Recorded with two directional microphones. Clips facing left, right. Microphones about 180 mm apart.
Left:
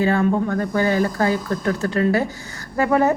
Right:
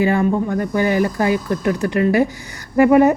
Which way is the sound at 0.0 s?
15° right (ahead or behind).